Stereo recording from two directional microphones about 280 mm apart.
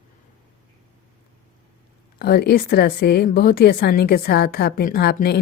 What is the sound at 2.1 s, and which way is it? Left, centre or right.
A woman's voice, left.